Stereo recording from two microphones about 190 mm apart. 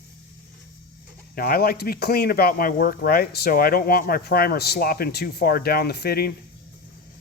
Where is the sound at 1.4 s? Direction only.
55° left (ahead or behind).